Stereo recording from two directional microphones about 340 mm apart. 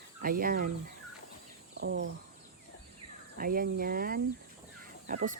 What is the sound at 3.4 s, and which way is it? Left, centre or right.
Speech, right.